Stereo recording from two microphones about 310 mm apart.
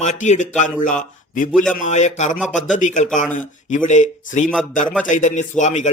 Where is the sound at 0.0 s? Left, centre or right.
Left.